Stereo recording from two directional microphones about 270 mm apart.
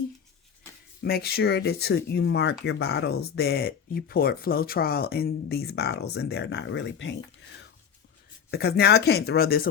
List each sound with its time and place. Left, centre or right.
1.0 s speech: left
8.4 s speech: left